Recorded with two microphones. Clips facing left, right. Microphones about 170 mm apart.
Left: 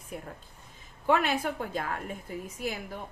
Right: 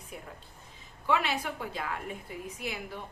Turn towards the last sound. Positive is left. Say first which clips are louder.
# left 3 dB
turn(degrees=45)  # may be behind; listen again after turning